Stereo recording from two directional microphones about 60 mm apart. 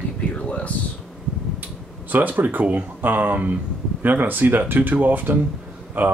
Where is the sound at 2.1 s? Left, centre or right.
Right.